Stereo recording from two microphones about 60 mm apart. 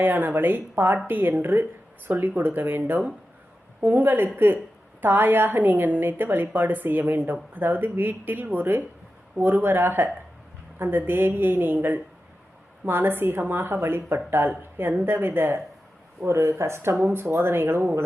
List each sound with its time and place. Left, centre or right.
0.0 s a woman's voice: right